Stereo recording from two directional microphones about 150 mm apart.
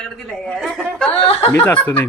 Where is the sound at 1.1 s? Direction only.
40° left (ahead or behind).